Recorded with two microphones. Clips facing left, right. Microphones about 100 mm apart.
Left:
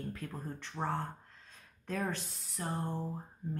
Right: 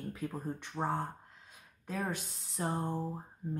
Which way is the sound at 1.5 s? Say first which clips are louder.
Left 1 dB; 10° right (ahead or behind).